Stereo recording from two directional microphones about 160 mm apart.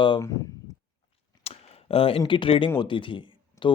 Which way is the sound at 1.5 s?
35° left (ahead or behind).